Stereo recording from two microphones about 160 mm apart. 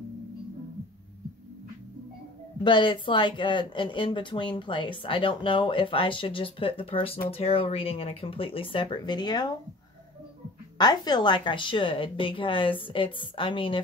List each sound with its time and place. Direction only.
2.6 s speech: 30° left (ahead or behind)
10.8 s speech: 25° left (ahead or behind)